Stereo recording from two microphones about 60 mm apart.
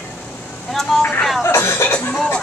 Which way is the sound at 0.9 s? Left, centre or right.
Centre.